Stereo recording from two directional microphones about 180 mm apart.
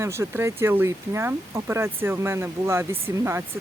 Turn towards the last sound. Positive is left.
turn(degrees=-15)  # may be behind; listen again after turning